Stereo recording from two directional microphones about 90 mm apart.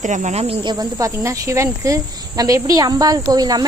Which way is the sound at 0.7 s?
40° right (ahead or behind).